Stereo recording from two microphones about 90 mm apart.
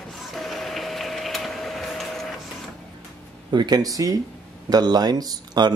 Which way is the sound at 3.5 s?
50° right (ahead or behind).